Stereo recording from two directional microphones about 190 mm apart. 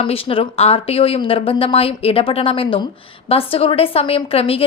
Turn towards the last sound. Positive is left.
turn(degrees=30)  # may be behind; listen again after turning